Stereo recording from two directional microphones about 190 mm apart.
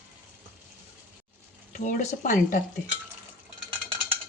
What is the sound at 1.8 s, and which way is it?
Speech, 40° left (ahead or behind).